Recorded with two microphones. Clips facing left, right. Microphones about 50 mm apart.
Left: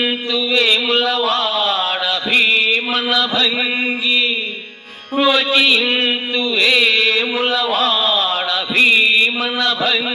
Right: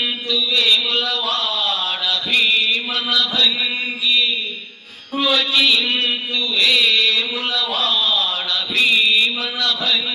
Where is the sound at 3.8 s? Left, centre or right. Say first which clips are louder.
Left 2 dB; left.